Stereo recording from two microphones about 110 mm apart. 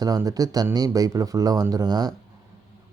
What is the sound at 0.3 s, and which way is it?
Speech, 35° right (ahead or behind).